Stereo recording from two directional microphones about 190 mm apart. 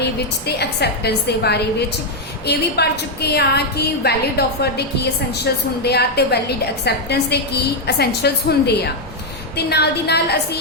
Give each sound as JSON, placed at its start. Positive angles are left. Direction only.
{"t": 0.0, "sound": "a woman's voice", "side_deg": 60}